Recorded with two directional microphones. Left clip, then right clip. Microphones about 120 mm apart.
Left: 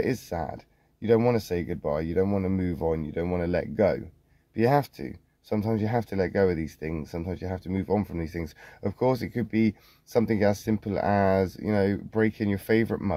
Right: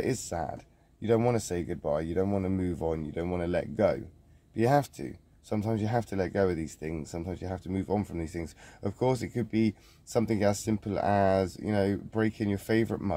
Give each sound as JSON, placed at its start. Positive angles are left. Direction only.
{"t": 0.0, "sound": "speech", "side_deg": 30}